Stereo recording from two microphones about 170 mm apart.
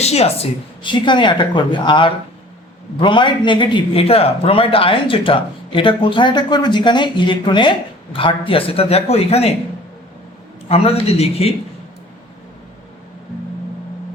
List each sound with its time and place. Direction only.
0.0 s a man's voice: 40° left (ahead or behind)
10.7 s a man's voice: 35° left (ahead or behind)